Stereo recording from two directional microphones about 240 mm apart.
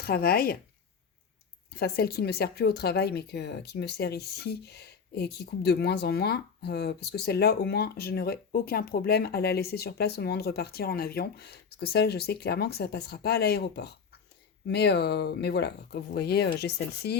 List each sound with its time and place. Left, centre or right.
0.0 s speech: left
1.7 s speech: left